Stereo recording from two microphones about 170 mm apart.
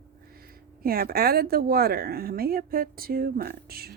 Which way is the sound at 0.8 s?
60° right (ahead or behind).